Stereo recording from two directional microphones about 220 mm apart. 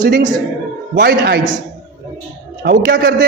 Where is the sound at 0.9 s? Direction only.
45° right (ahead or behind).